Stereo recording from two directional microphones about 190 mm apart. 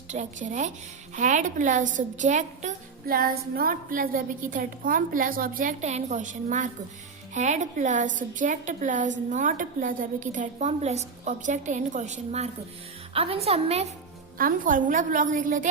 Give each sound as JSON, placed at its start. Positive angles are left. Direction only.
{"t": 0.1, "sound": "a woman's voice", "side_deg": -40}
{"t": 14.3, "sound": "a woman's voice", "side_deg": -45}